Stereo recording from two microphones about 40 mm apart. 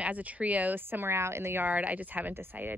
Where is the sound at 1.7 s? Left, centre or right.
Right.